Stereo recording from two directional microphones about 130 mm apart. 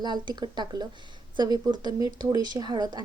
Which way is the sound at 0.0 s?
35° right (ahead or behind).